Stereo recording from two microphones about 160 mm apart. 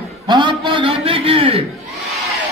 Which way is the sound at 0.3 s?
30° right (ahead or behind).